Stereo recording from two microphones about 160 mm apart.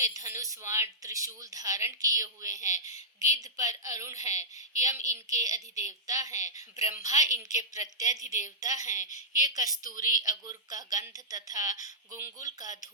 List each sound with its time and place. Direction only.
0.0 s a woman's voice: 20° right (ahead or behind)